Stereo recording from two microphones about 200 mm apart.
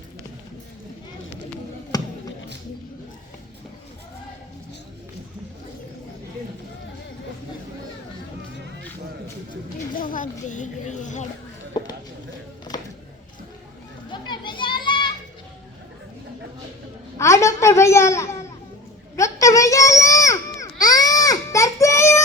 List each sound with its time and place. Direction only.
1.9 s basketball bounce: 20° left (ahead or behind)
10.0 s a sound: 40° left (ahead or behind)
10.5 s speech: 40° left (ahead or behind)
14.1 s children playing: 25° left (ahead or behind)
17.2 s babbling: 15° left (ahead or behind)
19.1 s baby cry: 15° left (ahead or behind)